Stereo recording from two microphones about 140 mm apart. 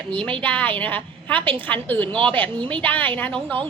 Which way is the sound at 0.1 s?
5° left (ahead or behind).